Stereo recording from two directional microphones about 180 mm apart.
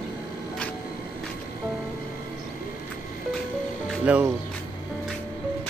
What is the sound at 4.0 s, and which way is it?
Speech, 5° right (ahead or behind).